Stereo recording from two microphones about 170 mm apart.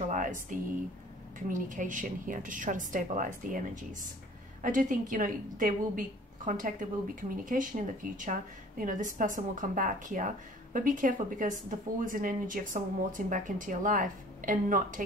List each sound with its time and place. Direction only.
0.1 s a woman's voice: 50° right (ahead or behind)